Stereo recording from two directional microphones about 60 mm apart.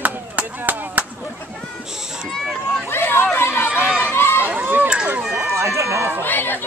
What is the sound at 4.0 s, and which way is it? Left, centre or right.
Run, left.